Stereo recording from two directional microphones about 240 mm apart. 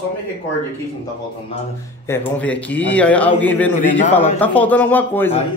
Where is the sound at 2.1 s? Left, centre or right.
Centre.